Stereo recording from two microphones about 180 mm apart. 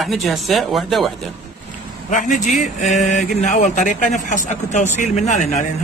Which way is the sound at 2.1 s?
45° left (ahead or behind).